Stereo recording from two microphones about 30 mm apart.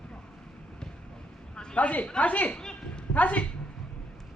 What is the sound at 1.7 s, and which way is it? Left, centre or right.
Speech, left.